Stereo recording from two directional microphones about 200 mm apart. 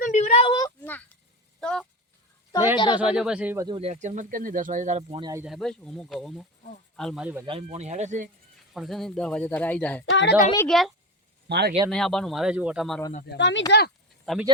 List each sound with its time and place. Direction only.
0.0 s a sound: 35° left (ahead or behind)
1.6 s a sound: 5° left (ahead or behind)
2.7 s speech: 25° left (ahead or behind)
3.0 s speech: 5° right (ahead or behind)
3.7 s speech: 30° right (ahead or behind)
5.4 s speech: centre (ahead or behind)
7.4 s speech: 30° right (ahead or behind)
8.7 s speech: centre (ahead or behind)
10.1 s a woman's voice: 60° left (ahead or behind)
10.7 s speech: centre (ahead or behind)
11.4 s speech: 55° right (ahead or behind)
11.9 s speech: centre (ahead or behind)
13.3 s a woman's voice: 65° left (ahead or behind)
14.3 s speech: centre (ahead or behind)